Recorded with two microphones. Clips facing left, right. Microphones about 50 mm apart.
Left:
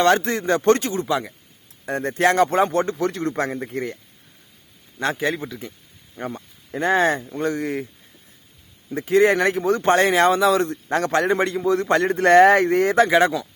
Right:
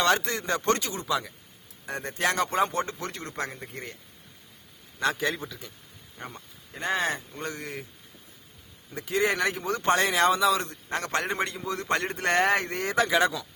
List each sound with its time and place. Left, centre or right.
0.0 s speech: left
1.9 s speech: left
3.0 s speech: left
5.1 s a man's voice: left
6.2 s speech: left
7.4 s speech: left
8.9 s speech: left
10.9 s a man's voice: left
12.1 s speech: left